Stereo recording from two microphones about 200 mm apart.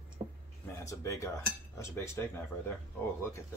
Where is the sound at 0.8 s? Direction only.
15° left (ahead or behind).